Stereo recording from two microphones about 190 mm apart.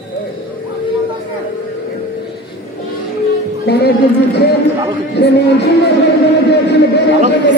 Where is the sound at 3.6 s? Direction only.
60° left (ahead or behind).